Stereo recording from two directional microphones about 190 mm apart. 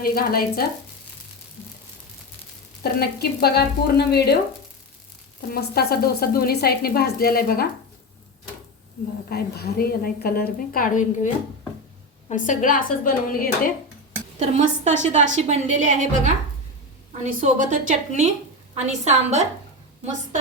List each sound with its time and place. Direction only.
0.0 s a woman's voice: 50° left (ahead or behind)
2.8 s speech: 55° left (ahead or behind)
5.5 s a woman's voice: 55° left (ahead or behind)
9.3 s a woman's voice: 55° left (ahead or behind)
12.3 s a woman's voice: 40° left (ahead or behind)
14.3 s a woman's voice: 35° right (ahead or behind)